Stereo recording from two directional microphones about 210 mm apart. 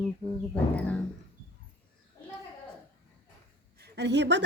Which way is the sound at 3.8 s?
55° right (ahead or behind).